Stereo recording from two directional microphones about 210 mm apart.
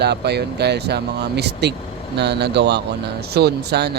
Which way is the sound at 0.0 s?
50° right (ahead or behind).